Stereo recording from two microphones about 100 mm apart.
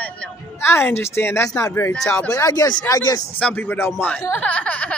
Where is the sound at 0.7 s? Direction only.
25° left (ahead or behind).